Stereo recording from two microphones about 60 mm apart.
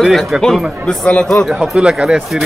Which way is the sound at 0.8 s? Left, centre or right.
Centre.